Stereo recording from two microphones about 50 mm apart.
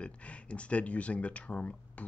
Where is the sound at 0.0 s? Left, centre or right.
Left.